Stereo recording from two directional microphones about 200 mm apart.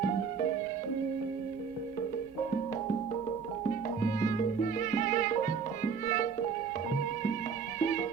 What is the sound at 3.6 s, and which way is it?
Music, 40° left (ahead or behind).